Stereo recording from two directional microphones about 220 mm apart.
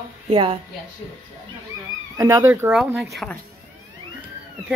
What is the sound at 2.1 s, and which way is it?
Speech, 15° right (ahead or behind).